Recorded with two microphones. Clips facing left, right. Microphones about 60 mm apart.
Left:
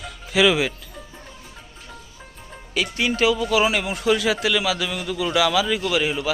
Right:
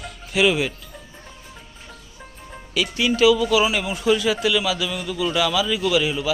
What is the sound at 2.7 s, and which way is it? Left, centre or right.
A man's voice, left.